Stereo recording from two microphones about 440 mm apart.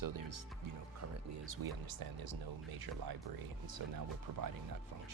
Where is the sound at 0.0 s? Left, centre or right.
Right.